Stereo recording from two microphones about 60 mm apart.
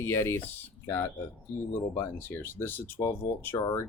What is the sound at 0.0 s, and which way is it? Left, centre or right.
Speech, left.